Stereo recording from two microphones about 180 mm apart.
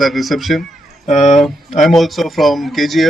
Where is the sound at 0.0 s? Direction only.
Centre (ahead or behind).